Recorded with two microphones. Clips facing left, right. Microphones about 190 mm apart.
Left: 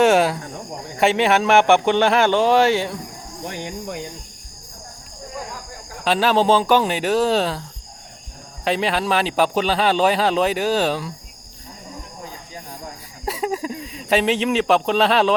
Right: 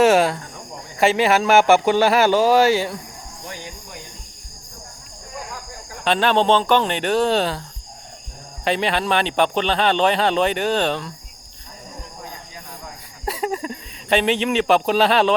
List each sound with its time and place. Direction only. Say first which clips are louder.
0.0 s speech: even; centre (ahead or behind)
3.4 s speech: left 8 dB; 65° left (ahead or behind)
6.1 s speech: even; 5° left (ahead or behind)
8.6 s speech: even; centre (ahead or behind)
13.2 s speech: left 1 dB; centre (ahead or behind)